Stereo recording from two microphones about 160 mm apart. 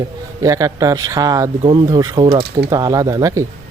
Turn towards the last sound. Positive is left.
turn(degrees=-20)  # may be behind; listen again after turning